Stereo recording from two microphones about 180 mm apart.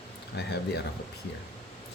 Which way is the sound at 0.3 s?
65° left (ahead or behind).